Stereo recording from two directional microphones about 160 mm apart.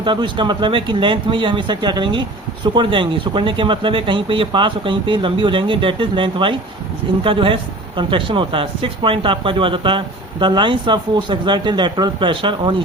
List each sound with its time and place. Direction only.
0.0 s speech: 30° right (ahead or behind)